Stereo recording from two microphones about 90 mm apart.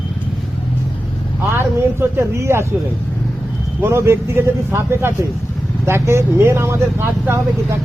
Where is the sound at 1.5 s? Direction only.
30° right (ahead or behind).